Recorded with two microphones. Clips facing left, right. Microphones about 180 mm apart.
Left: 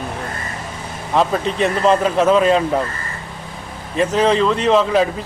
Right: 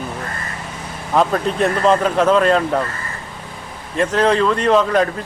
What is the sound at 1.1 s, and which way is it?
Speech, centre (ahead or behind).